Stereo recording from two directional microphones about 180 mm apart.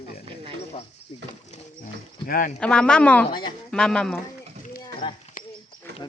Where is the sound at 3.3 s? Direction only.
25° left (ahead or behind).